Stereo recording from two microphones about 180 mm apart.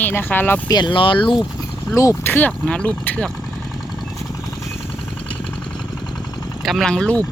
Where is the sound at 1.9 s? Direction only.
15° left (ahead or behind).